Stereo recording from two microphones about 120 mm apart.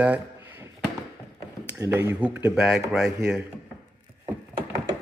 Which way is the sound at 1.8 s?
20° right (ahead or behind).